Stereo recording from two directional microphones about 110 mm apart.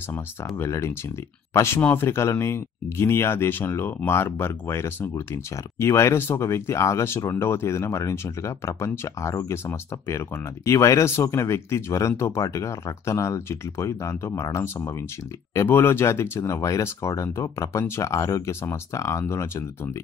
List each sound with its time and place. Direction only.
0.6 s speech: 25° left (ahead or behind)